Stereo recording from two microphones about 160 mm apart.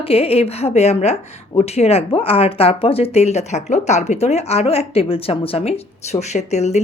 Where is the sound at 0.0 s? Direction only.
35° left (ahead or behind).